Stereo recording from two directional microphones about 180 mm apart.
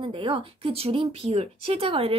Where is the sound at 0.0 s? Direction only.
30° right (ahead or behind).